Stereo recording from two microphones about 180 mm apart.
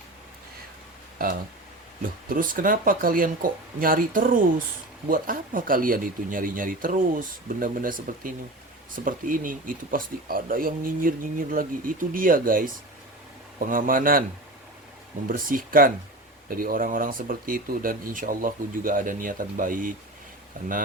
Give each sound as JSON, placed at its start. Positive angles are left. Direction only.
{"t": 2.3, "sound": "speech", "side_deg": -50}
{"t": 15.3, "sound": "speech", "side_deg": -50}